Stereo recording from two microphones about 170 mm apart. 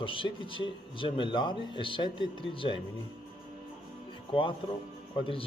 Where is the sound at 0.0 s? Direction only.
30° left (ahead or behind).